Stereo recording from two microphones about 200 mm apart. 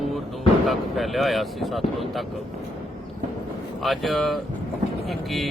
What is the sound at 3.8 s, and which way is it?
Speech, centre (ahead or behind).